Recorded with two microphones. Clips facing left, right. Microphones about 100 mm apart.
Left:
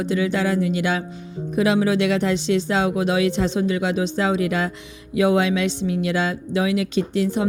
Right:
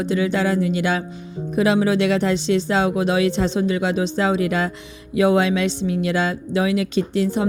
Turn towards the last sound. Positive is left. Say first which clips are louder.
# right 1 dB
turn(degrees=-35)  # may be behind; listen again after turning